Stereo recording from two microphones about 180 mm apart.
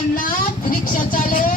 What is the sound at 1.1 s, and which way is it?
Speech, 50° left (ahead or behind).